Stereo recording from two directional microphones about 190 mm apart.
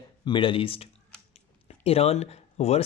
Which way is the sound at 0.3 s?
25° left (ahead or behind).